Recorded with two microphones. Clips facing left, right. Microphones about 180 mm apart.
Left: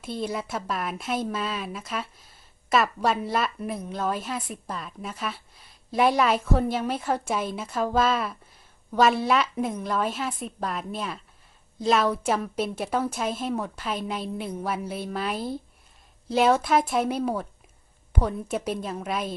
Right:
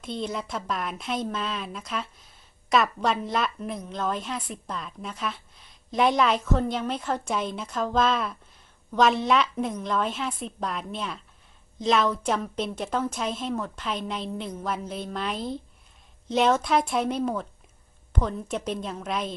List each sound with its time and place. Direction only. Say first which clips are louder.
0.0 s a woman's voice: left 1 dB; 5° left (ahead or behind)